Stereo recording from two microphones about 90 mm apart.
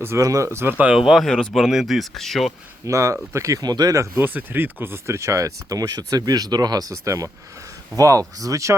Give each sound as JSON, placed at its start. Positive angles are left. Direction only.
{"t": 0.0, "sound": "speech", "side_deg": -35}
{"t": 0.9, "sound": "speech", "side_deg": -5}
{"t": 2.8, "sound": "speech", "side_deg": -35}
{"t": 3.6, "sound": "speech", "side_deg": -45}
{"t": 4.2, "sound": "speech", "side_deg": -20}